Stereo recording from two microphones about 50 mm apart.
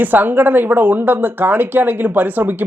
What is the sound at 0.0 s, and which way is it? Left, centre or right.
Speech, right.